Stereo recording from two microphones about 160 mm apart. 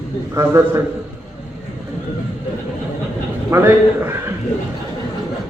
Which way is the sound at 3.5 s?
15° right (ahead or behind).